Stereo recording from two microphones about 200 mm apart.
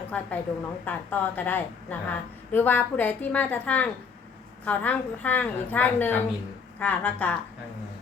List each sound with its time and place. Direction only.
0.1 s a woman's voice: 5° left (ahead or behind)